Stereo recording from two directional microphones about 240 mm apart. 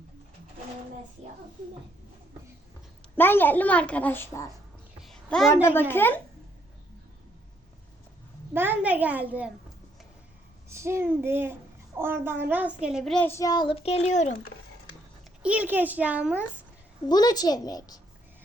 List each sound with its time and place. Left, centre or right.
3.2 s a woman's voice: centre
5.0 s a sound: centre
5.9 s a woman's voice: centre
8.5 s a child's voice: centre
10.7 s a child's voice: centre; by 14.3 s left
15.4 s a child's voice: centre
17.1 s a woman's voice: centre